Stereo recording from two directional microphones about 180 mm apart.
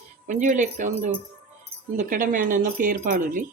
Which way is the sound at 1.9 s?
50° right (ahead or behind).